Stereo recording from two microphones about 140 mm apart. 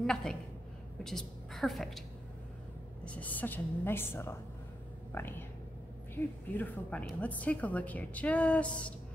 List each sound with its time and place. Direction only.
0.0 s a woman's voice: 5° left (ahead or behind)
3.1 s a woman's voice: 10° left (ahead or behind)